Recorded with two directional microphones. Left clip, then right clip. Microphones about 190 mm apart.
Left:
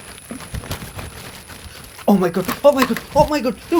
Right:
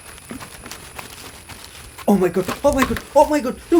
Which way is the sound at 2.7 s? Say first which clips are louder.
Left 1 dB; 35° left (ahead or behind).